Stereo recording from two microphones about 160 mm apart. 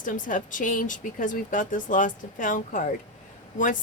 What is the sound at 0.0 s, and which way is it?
Speech, 55° left (ahead or behind).